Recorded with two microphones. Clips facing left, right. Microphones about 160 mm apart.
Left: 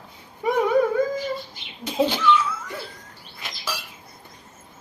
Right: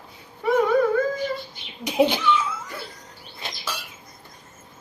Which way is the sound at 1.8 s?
15° right (ahead or behind).